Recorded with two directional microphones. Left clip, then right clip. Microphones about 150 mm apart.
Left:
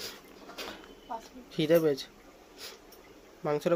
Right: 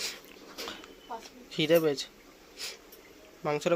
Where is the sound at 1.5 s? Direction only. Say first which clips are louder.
Even; 20° left (ahead or behind).